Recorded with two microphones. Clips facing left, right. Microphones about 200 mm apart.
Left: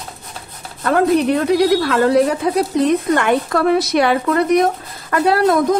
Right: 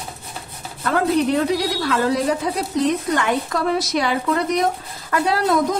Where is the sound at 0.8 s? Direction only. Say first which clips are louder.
Left 4 dB; 60° left (ahead or behind).